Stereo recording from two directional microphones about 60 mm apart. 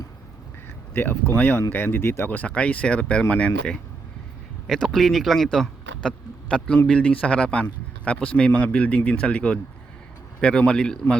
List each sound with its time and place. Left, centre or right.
1.4 s speech: left
2.3 s speech: left
4.6 s a man's voice: centre